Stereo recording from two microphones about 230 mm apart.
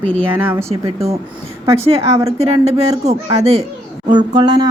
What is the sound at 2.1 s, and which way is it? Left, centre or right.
Speech, centre.